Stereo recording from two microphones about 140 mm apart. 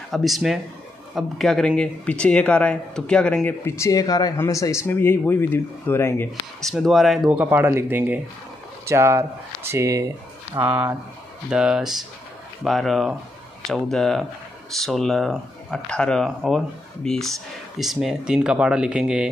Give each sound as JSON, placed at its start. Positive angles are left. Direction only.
{"t": 0.1, "sound": "speech", "side_deg": 0}
{"t": 6.6, "sound": "speech", "side_deg": 0}
{"t": 7.2, "sound": "speech", "side_deg": -10}